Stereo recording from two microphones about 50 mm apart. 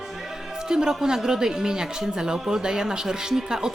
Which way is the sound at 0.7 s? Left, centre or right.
Centre.